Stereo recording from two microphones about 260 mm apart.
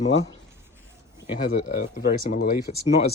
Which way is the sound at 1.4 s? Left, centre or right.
Left.